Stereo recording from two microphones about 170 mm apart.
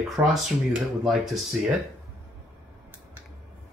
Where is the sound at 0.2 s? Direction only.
15° right (ahead or behind).